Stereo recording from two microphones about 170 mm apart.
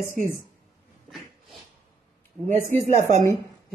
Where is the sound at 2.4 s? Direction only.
45° right (ahead or behind).